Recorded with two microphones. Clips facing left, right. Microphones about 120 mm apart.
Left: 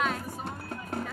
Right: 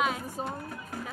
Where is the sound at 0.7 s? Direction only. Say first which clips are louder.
Left 4 dB; 60° left (ahead or behind).